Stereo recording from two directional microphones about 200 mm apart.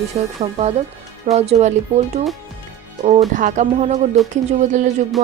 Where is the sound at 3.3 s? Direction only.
40° right (ahead or behind).